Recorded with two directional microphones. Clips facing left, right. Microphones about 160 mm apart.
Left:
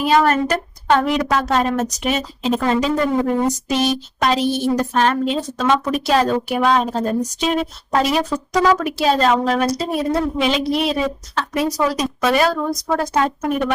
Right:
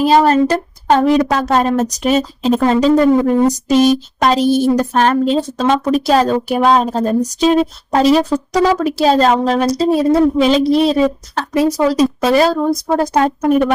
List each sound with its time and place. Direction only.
0.0 s a woman's voice: 30° right (ahead or behind)